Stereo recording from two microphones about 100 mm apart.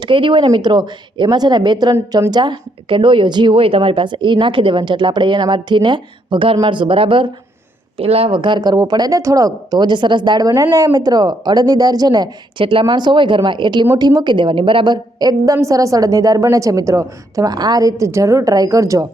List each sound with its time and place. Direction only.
0.0 s a woman's voice: 50° right (ahead or behind)
7.9 s a woman's voice: 75° right (ahead or behind); by 14.9 s 55° right (ahead or behind)
15.2 s a woman's voice: 40° right (ahead or behind)